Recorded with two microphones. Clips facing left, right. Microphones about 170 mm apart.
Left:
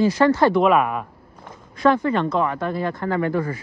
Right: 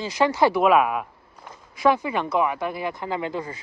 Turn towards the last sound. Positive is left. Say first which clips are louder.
# left 6 dB
turn(degrees=-20)  # may be behind; listen again after turning